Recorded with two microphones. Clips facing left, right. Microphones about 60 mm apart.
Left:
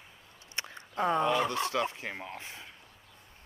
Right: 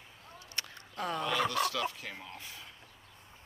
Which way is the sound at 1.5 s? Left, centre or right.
Left.